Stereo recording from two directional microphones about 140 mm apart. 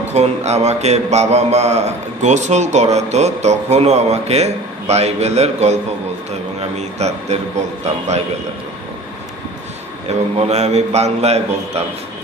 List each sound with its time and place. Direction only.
0.1 s a man's voice: 55° right (ahead or behind)
6.8 s a man's voice: 50° right (ahead or behind)
10.3 s a man's voice: 50° right (ahead or behind)